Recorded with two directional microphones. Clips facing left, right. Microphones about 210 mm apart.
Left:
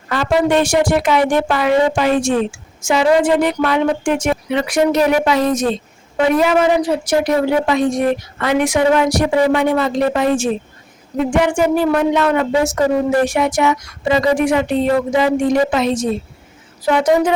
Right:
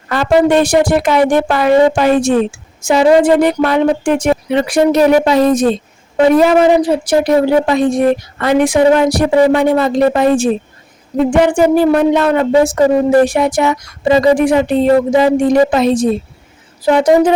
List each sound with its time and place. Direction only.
0.1 s speech: 40° right (ahead or behind)